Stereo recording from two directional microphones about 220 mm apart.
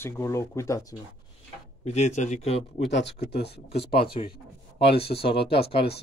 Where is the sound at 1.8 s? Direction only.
30° left (ahead or behind).